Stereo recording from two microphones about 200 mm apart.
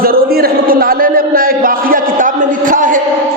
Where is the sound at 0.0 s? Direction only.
45° right (ahead or behind).